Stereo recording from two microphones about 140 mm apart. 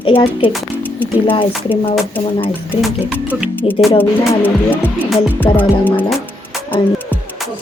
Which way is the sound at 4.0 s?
15° left (ahead or behind).